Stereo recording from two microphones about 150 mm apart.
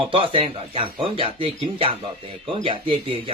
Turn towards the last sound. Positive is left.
turn(degrees=-35)  # may be behind; listen again after turning